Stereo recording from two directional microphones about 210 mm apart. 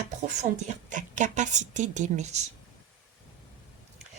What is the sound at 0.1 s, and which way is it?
Speech, 35° right (ahead or behind).